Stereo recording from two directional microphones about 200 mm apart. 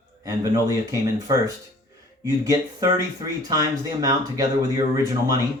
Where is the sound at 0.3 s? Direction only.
15° right (ahead or behind).